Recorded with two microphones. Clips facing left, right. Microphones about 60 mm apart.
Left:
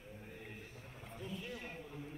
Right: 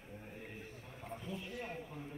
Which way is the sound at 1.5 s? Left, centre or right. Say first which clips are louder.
Right 3 dB; right.